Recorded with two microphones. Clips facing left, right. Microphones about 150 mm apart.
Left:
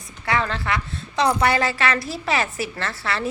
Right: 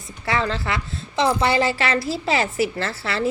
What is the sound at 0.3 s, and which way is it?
A woman's voice, 30° right (ahead or behind).